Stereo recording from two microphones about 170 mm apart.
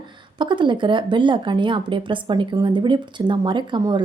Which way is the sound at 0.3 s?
30° right (ahead or behind).